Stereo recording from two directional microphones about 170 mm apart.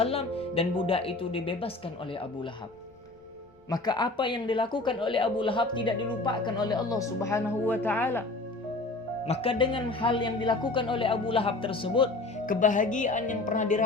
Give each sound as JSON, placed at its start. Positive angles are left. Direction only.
{"t": 0.0, "sound": "speech", "side_deg": 35}
{"t": 3.7, "sound": "speech", "side_deg": 25}
{"t": 9.2, "sound": "speech", "side_deg": 35}
{"t": 12.5, "sound": "speech", "side_deg": 50}